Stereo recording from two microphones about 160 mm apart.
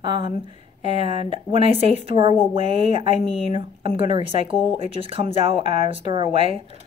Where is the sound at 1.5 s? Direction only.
35° right (ahead or behind).